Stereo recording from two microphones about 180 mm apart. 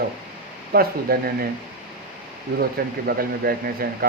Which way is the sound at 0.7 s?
55° right (ahead or behind).